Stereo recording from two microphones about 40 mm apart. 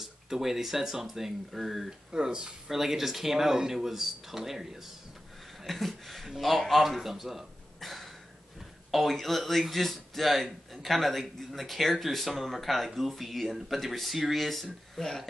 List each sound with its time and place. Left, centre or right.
0.0 s speech: centre
2.1 s speech: centre
2.7 s speech: centre
5.6 s a man's voice: centre